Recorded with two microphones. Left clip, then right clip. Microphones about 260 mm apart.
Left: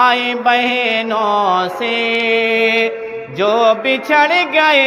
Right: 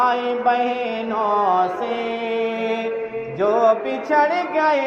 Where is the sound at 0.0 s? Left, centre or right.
Left.